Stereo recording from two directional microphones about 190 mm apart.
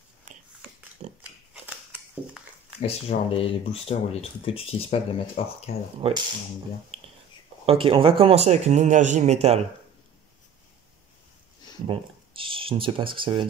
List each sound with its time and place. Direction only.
0.3 s a sound: 40° right (ahead or behind)
1.0 s pig: 40° right (ahead or behind)
1.5 s scissors: 5° right (ahead or behind)
2.8 s speech: 30° left (ahead or behind)
5.9 s speech: 30° right (ahead or behind)
6.9 s finger snapping: 30° right (ahead or behind)
7.6 s speech: 30° right (ahead or behind)
11.9 s speech: 30° right (ahead or behind)